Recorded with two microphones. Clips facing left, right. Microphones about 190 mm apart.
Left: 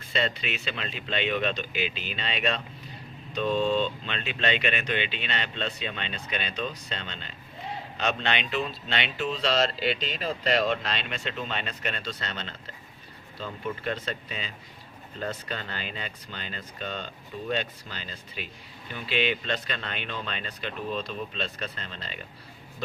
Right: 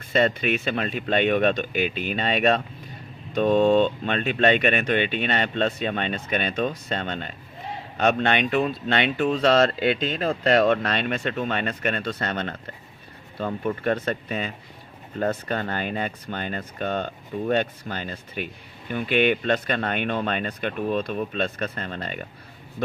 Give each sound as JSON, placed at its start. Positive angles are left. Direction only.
{"t": 0.1, "sound": "speech", "side_deg": -50}